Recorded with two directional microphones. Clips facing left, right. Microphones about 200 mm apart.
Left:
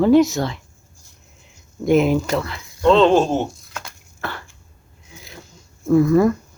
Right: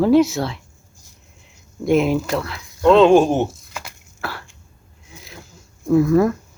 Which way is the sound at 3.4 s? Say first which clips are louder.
Even; 5° right (ahead or behind).